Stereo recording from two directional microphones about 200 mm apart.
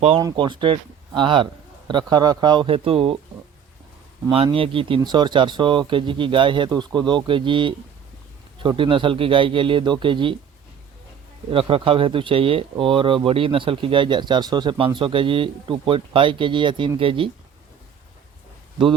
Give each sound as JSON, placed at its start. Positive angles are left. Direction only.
{"t": 0.2, "sound": "speech", "side_deg": -20}
{"t": 4.3, "sound": "speech", "side_deg": -25}
{"t": 11.5, "sound": "speech", "side_deg": -25}